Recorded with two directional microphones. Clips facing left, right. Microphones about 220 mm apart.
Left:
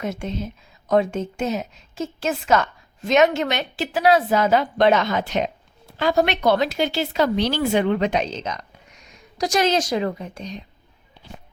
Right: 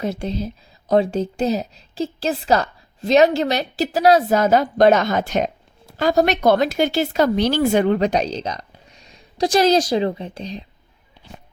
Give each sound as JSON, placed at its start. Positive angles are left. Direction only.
{"t": 0.0, "sound": "a woman's voice", "side_deg": -35}